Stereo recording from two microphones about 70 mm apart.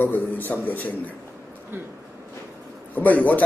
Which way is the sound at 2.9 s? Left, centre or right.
Left.